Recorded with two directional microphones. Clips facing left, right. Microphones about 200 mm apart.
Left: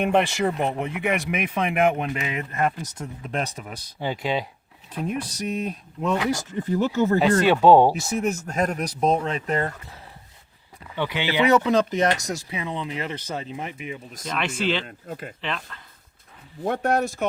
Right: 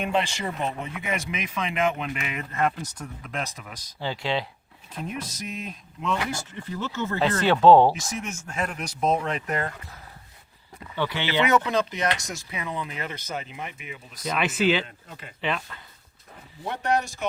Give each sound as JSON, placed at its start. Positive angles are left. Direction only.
{"t": 0.0, "sound": "speech", "side_deg": 55}
{"t": 2.0, "sound": "speech", "side_deg": 40}
{"t": 2.8, "sound": "speech", "side_deg": 25}
{"t": 4.0, "sound": "speech", "side_deg": 15}
{"t": 5.4, "sound": "speech", "side_deg": 35}
{"t": 7.2, "sound": "speech", "side_deg": 15}
{"t": 8.2, "sound": "speech", "side_deg": 35}
{"t": 10.9, "sound": "speech", "side_deg": 15}
{"t": 11.4, "sound": "speech", "side_deg": 35}
{"t": 14.3, "sound": "speech", "side_deg": -5}
{"t": 14.8, "sound": "speech", "side_deg": 50}
{"t": 15.4, "sound": "speech", "side_deg": -5}
{"t": 16.6, "sound": "speech", "side_deg": 50}